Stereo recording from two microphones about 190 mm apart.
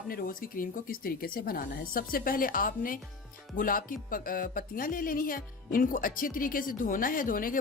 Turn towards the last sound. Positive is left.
turn(degrees=45)  # may be behind; listen again after turning